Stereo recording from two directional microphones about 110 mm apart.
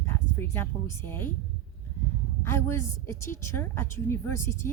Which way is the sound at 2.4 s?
25° left (ahead or behind).